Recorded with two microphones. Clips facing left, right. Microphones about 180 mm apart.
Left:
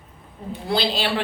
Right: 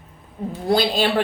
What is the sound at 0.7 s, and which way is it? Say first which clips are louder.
Speech: right 4 dB; 50° right (ahead or behind).